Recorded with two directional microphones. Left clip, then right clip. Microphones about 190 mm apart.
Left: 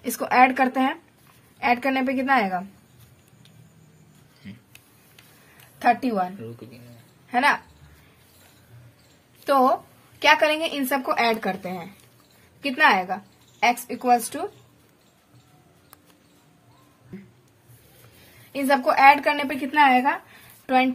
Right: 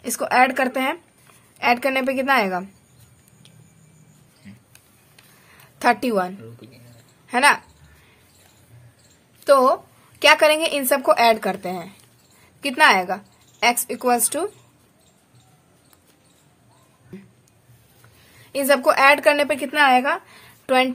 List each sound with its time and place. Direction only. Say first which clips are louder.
0.0 s a woman's voice: even; 25° right (ahead or behind)
4.4 s a sound: left 3 dB; 35° left (ahead or behind)
5.8 s a woman's voice: right 2 dB; 45° right (ahead or behind)
9.4 s a woman's voice: right 4 dB; 25° right (ahead or behind)
18.5 s a woman's voice: right 4 dB; 40° right (ahead or behind)